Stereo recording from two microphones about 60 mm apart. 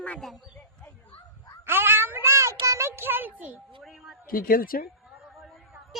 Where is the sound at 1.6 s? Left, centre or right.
Right.